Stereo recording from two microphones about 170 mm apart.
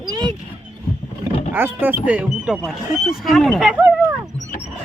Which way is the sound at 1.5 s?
10° right (ahead or behind).